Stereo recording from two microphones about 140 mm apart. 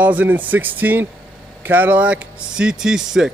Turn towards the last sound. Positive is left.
turn(degrees=-5)  # may be behind; listen again after turning